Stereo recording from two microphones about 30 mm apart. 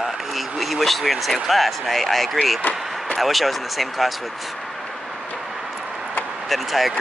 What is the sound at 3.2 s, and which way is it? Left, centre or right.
Speech, centre.